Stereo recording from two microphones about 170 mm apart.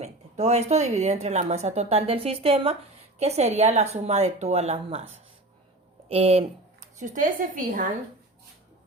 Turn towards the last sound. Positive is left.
turn(degrees=-50)  # may be behind; listen again after turning